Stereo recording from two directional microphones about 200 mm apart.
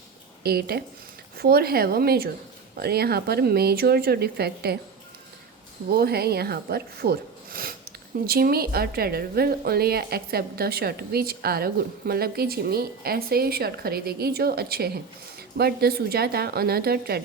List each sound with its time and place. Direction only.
0.4 s a woman's voice: 50° right (ahead or behind)
5.9 s a woman's voice: 50° right (ahead or behind)